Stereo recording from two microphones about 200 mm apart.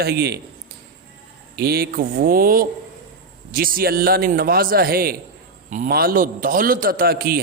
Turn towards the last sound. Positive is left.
turn(degrees=-50)  # may be behind; listen again after turning